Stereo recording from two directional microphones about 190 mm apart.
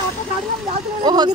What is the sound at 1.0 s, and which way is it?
Speech, 20° right (ahead or behind).